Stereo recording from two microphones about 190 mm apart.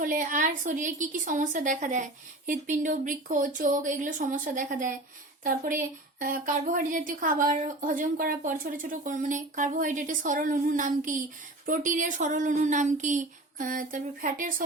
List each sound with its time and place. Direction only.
0.0 s speech: 45° right (ahead or behind)